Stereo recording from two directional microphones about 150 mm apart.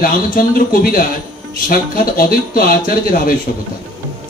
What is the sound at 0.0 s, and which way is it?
Speech, 70° left (ahead or behind).